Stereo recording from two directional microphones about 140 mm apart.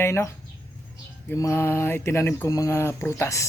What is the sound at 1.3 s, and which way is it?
Speech, 20° left (ahead or behind).